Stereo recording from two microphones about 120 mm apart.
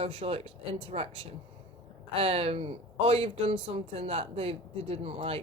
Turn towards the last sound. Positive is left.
turn(degrees=-50)  # may be behind; listen again after turning